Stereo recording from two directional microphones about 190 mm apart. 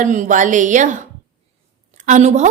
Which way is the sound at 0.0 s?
40° right (ahead or behind).